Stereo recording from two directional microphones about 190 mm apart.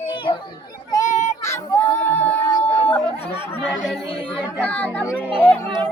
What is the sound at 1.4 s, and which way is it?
Child singing, 10° left (ahead or behind).